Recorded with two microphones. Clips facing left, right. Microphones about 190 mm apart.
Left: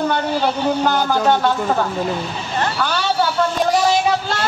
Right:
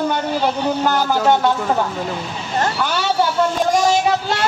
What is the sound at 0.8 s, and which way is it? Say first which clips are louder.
Speech: right 2 dB; 5° right (ahead or behind).